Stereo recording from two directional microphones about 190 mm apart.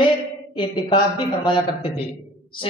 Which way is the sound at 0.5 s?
25° left (ahead or behind).